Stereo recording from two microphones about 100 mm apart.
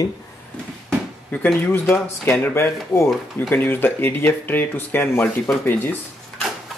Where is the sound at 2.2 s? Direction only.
20° left (ahead or behind).